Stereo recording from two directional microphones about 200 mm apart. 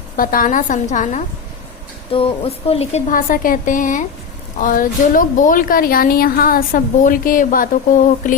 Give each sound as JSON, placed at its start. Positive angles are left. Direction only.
{"t": 0.2, "sound": "a woman's voice", "side_deg": 45}